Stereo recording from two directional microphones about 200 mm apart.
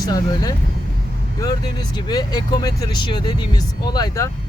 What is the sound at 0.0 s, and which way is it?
A man's voice, 20° left (ahead or behind).